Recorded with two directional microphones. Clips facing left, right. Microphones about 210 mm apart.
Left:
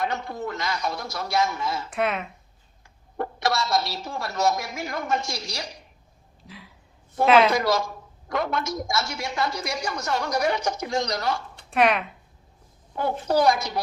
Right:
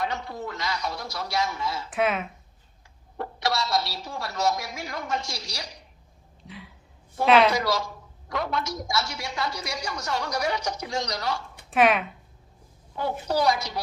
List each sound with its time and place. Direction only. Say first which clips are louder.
0.0 s a woman's voice: left 2 dB; 50° left (ahead or behind)
1.9 s speech: right 2 dB; centre (ahead or behind)
3.2 s a woman's voice: left 2 dB; 50° left (ahead or behind)
7.3 s speech: left 1 dB; centre (ahead or behind)
7.5 s a woman's voice: left 3 dB; 50° left (ahead or behind)
11.7 s speech: even; centre (ahead or behind)
13.0 s a woman's voice: left 3 dB; 50° left (ahead or behind)